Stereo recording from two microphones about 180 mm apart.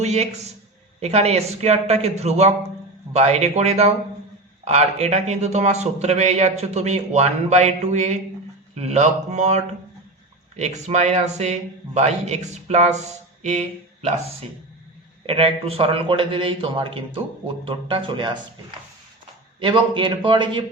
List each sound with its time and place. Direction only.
0.0 s a man's voice: 35° right (ahead or behind)
13.4 s a sound: 40° right (ahead or behind)
15.3 s a man's voice: 35° right (ahead or behind)
19.5 s a man's voice: 30° right (ahead or behind)